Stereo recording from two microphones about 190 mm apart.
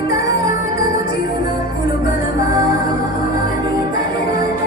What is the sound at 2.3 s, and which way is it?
Music, 20° right (ahead or behind).